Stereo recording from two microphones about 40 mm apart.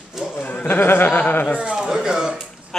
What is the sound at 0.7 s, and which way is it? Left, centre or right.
Speech, left.